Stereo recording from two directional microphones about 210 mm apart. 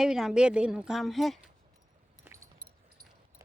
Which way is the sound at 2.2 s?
15° right (ahead or behind).